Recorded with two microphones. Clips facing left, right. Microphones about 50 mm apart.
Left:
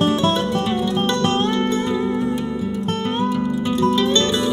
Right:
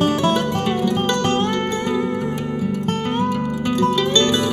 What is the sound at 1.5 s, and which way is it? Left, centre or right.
Music, right.